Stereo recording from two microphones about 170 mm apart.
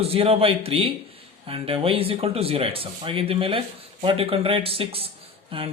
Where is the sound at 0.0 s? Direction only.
35° right (ahead or behind).